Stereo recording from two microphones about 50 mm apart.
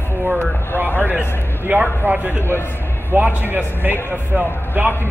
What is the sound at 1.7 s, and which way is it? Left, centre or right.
A man's voice, right.